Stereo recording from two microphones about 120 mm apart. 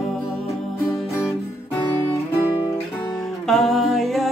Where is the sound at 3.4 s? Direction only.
Centre (ahead or behind).